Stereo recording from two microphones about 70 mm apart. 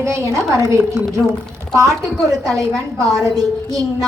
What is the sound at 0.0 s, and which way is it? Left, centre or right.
A woman's voice, right.